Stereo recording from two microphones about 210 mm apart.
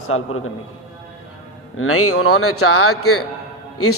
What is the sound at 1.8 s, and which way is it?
A man's voice, 90° left.